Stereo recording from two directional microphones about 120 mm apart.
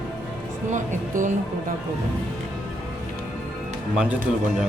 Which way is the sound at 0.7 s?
90° right.